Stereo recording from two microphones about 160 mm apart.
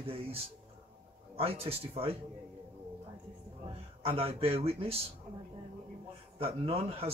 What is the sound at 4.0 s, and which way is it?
Speech, 35° right (ahead or behind).